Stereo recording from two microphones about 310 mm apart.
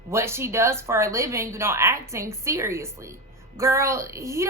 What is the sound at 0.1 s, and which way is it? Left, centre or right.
A woman's voice, centre.